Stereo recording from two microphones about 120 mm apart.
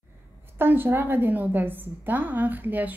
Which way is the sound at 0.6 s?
15° right (ahead or behind).